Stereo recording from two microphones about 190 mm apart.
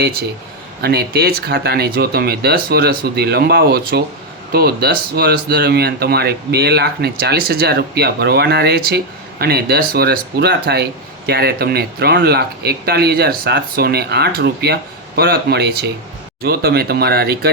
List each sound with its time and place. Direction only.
0.8 s speech: 55° right (ahead or behind)